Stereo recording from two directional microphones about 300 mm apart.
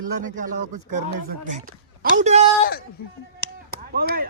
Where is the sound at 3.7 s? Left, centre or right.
Right.